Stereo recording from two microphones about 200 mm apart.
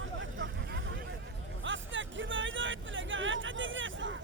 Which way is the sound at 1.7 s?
70° right (ahead or behind).